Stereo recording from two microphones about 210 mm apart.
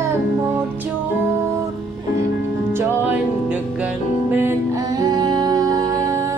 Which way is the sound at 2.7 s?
10° right (ahead or behind).